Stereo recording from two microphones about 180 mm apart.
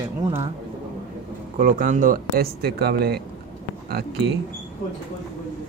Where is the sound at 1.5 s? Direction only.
45° right (ahead or behind).